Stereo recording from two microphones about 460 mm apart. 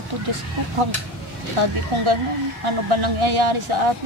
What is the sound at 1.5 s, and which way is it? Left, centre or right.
A man's voice, right.